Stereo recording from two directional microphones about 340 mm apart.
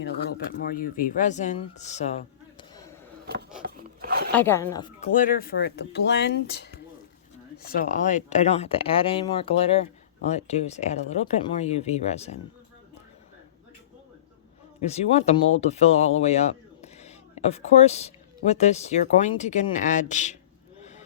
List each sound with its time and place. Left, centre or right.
0.0 s speech: left
3.6 s wood: right
4.3 s speech: centre
14.8 s a man's voice: centre